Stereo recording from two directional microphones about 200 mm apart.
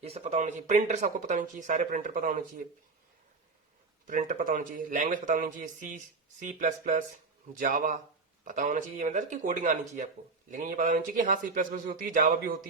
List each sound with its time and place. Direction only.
0.0 s speech: 30° right (ahead or behind)
4.0 s a man's voice: 40° right (ahead or behind)